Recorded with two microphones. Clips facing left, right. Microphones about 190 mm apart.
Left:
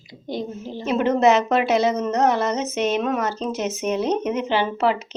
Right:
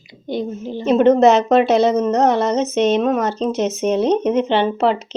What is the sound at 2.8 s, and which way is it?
Speech, 25° right (ahead or behind).